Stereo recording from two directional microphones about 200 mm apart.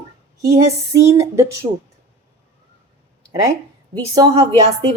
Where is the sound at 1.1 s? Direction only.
15° right (ahead or behind).